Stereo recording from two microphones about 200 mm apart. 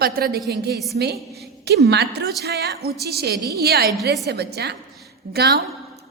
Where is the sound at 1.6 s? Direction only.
55° right (ahead or behind).